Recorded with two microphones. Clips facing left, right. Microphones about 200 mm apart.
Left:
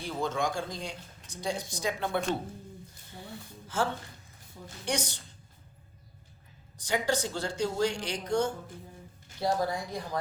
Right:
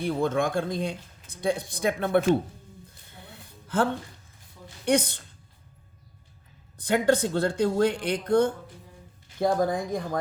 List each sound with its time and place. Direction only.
0.0 s speech: 55° right (ahead or behind)
3.7 s speech: 55° right (ahead or behind)
6.7 s speech: 55° right (ahead or behind)